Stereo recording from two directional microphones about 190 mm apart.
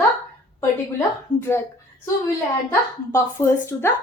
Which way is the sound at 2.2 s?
15° left (ahead or behind).